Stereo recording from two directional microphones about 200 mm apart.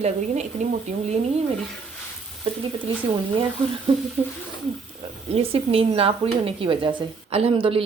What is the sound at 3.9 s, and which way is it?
Speech, 25° right (ahead or behind).